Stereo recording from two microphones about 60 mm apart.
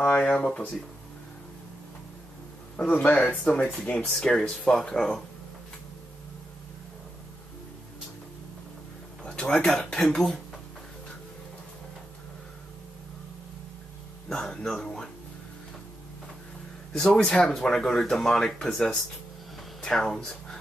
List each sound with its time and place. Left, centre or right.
0.0 s speech: centre
3.0 s speech: centre
9.2 s a sound: centre
9.7 s speech: centre
14.3 s speech: centre
16.9 s speech: centre